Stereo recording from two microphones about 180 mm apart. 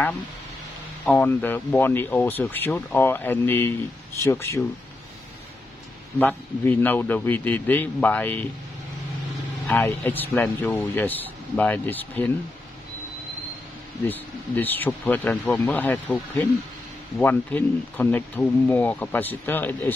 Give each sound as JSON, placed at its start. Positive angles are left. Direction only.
{"t": 1.0, "sound": "speech", "side_deg": 10}
{"t": 6.1, "sound": "speech", "side_deg": 10}
{"t": 9.7, "sound": "speech", "side_deg": 10}
{"t": 14.0, "sound": "speech", "side_deg": 10}